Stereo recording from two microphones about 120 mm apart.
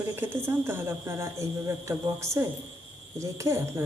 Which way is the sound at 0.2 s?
20° right (ahead or behind).